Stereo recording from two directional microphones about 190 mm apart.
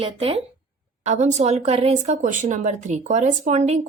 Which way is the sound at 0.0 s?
30° right (ahead or behind).